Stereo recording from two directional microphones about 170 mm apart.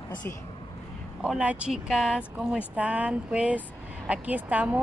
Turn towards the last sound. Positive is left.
turn(degrees=-10)  # may be behind; listen again after turning